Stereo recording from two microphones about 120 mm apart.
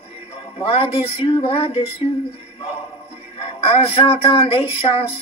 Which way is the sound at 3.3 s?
50° left (ahead or behind).